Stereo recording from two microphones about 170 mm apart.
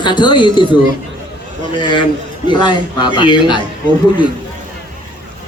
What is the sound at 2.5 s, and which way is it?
A woman's voice, 25° left (ahead or behind).